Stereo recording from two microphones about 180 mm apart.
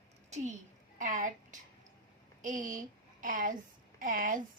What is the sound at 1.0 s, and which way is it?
A woman's voice, 45° right (ahead or behind).